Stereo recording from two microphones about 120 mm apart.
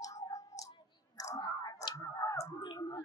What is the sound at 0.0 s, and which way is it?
Clicking, 30° left (ahead or behind).